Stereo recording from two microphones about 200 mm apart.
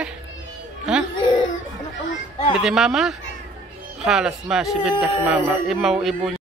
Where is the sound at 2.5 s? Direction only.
Centre (ahead or behind).